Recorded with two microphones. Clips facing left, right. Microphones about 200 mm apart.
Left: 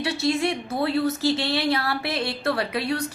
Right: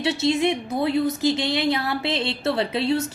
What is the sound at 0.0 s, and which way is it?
A woman's voice, 20° right (ahead or behind).